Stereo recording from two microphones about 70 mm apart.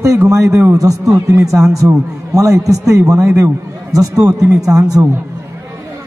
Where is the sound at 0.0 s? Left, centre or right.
Right.